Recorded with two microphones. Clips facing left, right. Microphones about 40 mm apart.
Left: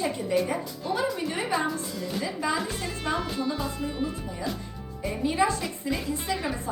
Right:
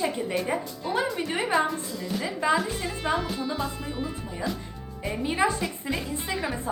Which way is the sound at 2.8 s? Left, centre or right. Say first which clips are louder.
Right 2 dB; centre.